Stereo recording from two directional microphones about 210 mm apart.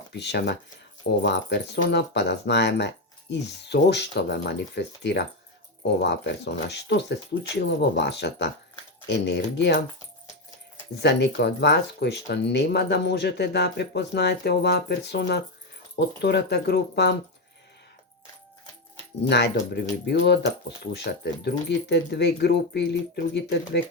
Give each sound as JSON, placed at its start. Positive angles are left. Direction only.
{"t": 0.1, "sound": "speech", "side_deg": 55}
{"t": 6.0, "sound": "speech", "side_deg": 55}
{"t": 11.0, "sound": "speech", "side_deg": 55}
{"t": 19.3, "sound": "speech", "side_deg": 55}